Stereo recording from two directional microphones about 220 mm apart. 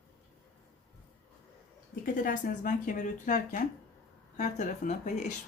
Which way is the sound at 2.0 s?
40° left (ahead or behind).